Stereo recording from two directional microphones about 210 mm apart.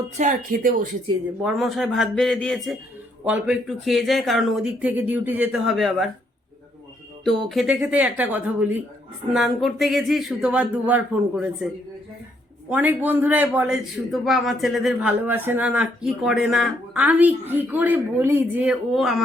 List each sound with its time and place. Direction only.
0.2 s speech: 40° right (ahead or behind)
1.5 s speech: centre (ahead or behind)
7.3 s a man's voice: centre (ahead or behind)
12.7 s a man's voice: 10° right (ahead or behind)